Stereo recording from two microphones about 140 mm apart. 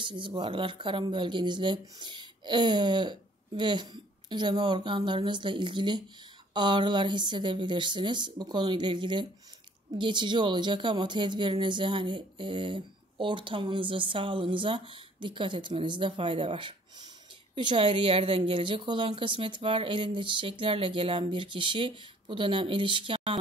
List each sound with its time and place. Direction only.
0.0 s speech: 35° right (ahead or behind)